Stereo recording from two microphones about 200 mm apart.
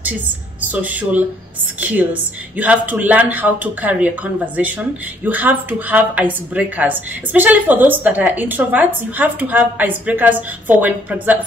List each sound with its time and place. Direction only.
0.7 s speech: 5° right (ahead or behind)